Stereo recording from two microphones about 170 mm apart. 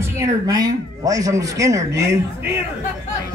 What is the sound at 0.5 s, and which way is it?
Speech, 25° right (ahead or behind).